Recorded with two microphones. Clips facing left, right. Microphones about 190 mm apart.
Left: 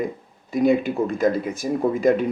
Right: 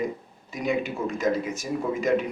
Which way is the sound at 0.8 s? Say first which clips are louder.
Left 7 dB; 60° left (ahead or behind).